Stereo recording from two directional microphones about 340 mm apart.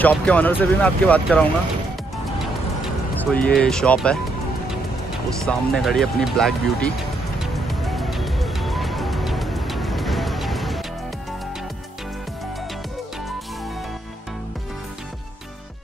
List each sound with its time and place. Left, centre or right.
0.0 s speech: centre
3.2 s speech: centre
5.4 s speech: centre
7.6 s music: centre